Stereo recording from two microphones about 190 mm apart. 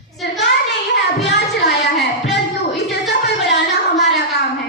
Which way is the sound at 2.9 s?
60° left (ahead or behind).